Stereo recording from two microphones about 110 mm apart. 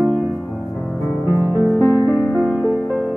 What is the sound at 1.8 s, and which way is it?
Music, 30° left (ahead or behind).